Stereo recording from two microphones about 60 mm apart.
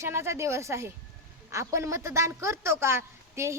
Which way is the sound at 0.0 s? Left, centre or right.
Right.